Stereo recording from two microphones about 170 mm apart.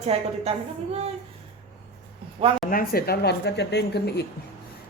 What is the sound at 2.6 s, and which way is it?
Speech, 60° left (ahead or behind).